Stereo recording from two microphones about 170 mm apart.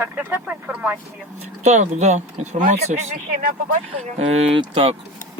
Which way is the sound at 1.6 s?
45° right (ahead or behind).